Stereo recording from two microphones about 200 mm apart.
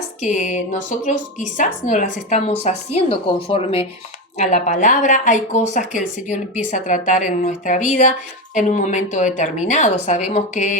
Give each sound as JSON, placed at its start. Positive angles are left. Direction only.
{"t": 0.2, "sound": "speech", "side_deg": 40}